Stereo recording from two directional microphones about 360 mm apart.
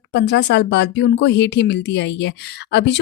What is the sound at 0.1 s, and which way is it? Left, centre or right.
Speech, left.